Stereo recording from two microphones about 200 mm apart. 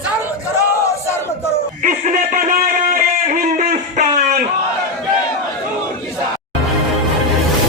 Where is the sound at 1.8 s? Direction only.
40° right (ahead or behind).